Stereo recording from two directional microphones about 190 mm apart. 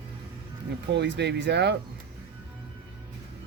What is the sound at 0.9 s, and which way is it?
Speech, 65° right (ahead or behind).